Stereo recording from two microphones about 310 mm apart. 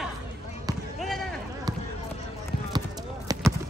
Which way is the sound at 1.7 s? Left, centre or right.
Centre.